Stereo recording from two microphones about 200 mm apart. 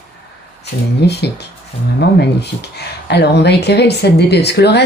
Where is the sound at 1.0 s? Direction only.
55° left (ahead or behind).